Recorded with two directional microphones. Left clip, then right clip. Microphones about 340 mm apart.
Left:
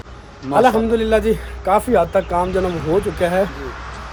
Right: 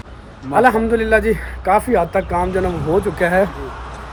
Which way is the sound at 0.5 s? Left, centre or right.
Centre.